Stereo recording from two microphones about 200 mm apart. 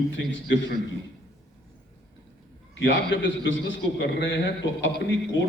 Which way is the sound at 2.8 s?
70° left (ahead or behind).